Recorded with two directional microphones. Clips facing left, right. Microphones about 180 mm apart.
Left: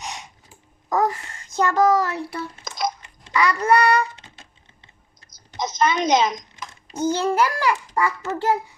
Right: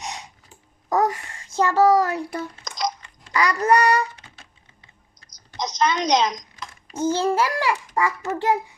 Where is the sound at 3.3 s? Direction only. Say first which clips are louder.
Left 1 dB; 40° right (ahead or behind).